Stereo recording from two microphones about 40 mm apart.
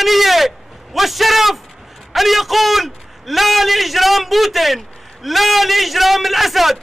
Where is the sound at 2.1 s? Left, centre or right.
Centre.